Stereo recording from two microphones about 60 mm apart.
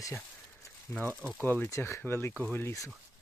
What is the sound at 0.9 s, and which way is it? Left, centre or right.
Speech, left.